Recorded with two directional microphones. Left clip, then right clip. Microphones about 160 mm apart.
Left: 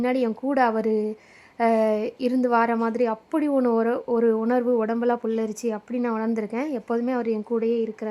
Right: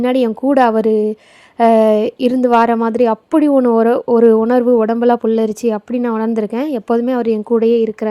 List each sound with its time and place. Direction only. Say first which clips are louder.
0.0 s speech: right 9 dB; 35° right (ahead or behind)